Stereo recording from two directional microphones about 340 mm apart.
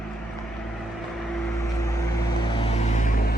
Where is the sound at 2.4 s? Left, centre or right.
Centre.